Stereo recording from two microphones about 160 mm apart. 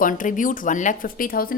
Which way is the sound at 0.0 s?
55° left (ahead or behind).